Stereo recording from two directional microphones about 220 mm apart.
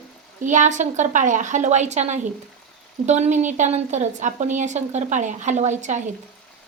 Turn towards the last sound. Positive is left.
turn(degrees=-35)  # may be behind; listen again after turning